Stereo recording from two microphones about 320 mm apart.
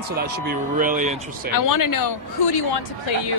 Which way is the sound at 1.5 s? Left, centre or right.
Left.